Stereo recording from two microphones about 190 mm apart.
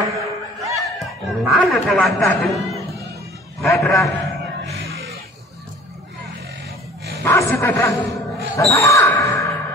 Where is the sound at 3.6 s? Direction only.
15° left (ahead or behind).